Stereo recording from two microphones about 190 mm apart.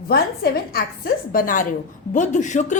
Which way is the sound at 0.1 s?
55° left (ahead or behind).